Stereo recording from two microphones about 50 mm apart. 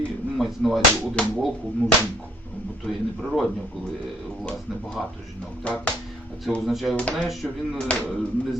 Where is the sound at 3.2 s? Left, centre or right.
Centre.